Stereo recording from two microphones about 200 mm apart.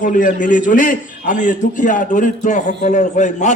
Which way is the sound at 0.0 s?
40° left (ahead or behind).